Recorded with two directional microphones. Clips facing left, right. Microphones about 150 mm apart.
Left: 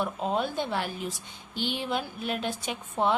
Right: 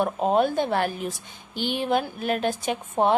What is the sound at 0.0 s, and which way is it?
Speech, 50° right (ahead or behind).